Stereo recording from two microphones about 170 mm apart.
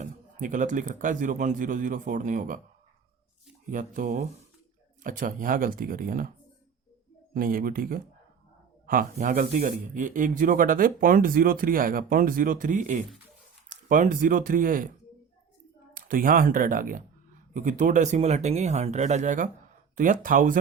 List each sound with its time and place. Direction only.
0.0 s speech: 50° right (ahead or behind)
3.7 s speech: 50° right (ahead or behind)
7.3 s speech: 55° right (ahead or behind)
16.0 s speech: 55° right (ahead or behind)